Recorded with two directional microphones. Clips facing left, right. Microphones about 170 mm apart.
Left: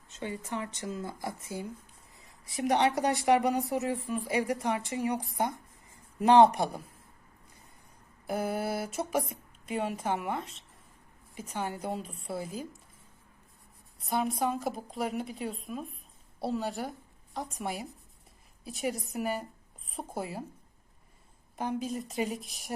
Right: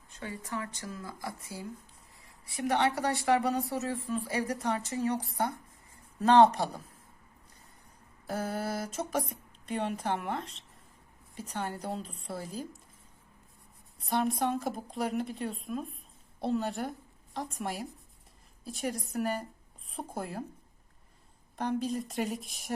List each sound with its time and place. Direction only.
0.1 s a woman's voice: 20° left (ahead or behind)
8.3 s a woman's voice: 10° left (ahead or behind)
14.0 s speech: centre (ahead or behind)
21.5 s speech: 5° left (ahead or behind)